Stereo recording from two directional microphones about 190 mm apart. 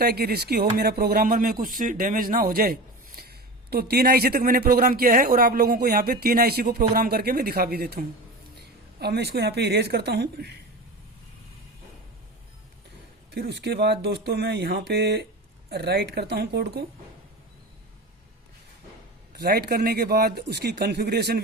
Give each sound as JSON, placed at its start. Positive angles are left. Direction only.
{"t": 0.0, "sound": "a man's voice", "side_deg": -55}
{"t": 13.3, "sound": "a man's voice", "side_deg": -60}
{"t": 19.4, "sound": "a man's voice", "side_deg": -55}